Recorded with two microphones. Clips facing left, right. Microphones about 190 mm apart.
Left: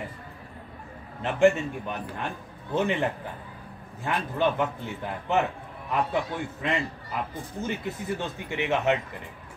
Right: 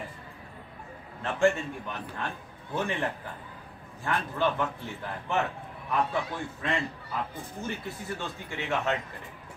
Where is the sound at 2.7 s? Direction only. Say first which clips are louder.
Left 5 dB; 20° left (ahead or behind).